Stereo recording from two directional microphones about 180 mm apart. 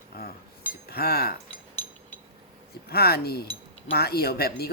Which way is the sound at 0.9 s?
60° left (ahead or behind).